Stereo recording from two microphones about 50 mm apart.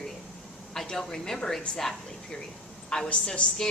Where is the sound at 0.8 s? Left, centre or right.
Centre.